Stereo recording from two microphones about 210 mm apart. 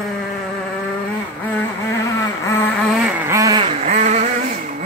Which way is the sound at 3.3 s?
15° right (ahead or behind).